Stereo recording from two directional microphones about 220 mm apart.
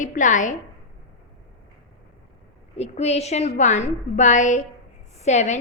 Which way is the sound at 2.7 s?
30° left (ahead or behind).